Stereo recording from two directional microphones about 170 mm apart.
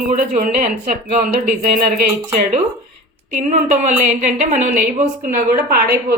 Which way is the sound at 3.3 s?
45° right (ahead or behind).